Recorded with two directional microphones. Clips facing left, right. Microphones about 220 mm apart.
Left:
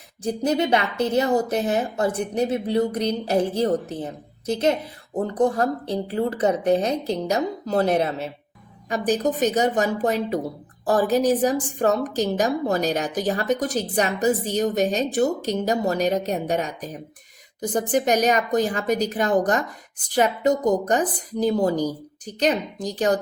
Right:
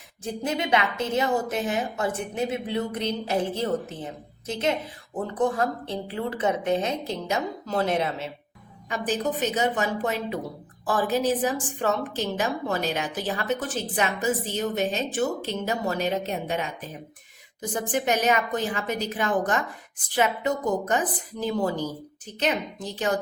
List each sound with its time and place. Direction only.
0.2 s a woman's voice: 40° left (ahead or behind)